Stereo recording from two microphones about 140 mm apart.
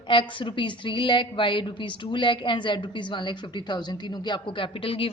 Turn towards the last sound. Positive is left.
turn(degrees=40)  # may be behind; listen again after turning